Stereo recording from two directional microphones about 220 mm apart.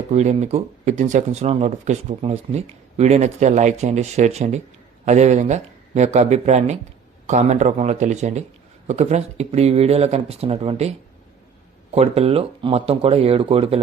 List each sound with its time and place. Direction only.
0.1 s speech: 30° right (ahead or behind)